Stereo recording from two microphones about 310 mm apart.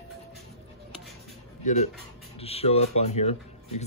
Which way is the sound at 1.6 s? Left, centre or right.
Left.